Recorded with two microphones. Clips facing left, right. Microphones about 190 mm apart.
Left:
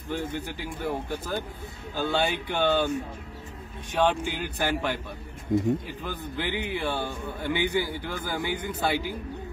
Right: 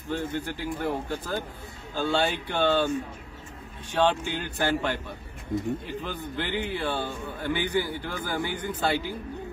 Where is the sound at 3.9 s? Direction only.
10° left (ahead or behind).